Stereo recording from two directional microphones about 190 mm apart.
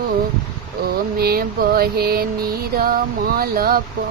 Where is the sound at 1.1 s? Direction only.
55° right (ahead or behind).